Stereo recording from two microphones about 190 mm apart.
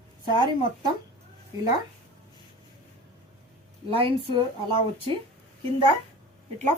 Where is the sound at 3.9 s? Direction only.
30° right (ahead or behind).